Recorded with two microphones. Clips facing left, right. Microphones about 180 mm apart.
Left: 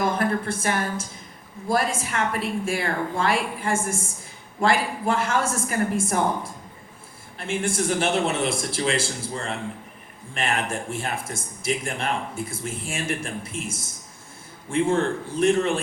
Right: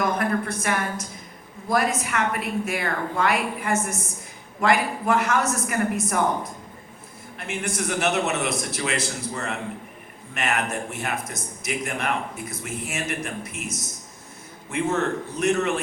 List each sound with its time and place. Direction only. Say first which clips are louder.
0.0 s a woman's voice: even; 30° left (ahead or behind)